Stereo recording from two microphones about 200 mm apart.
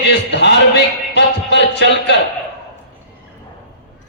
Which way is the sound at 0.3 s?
60° left (ahead or behind).